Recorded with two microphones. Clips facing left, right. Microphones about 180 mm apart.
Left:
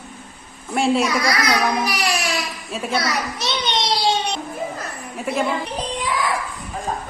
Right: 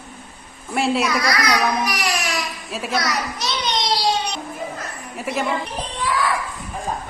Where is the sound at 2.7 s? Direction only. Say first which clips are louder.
Left 1 dB; centre (ahead or behind).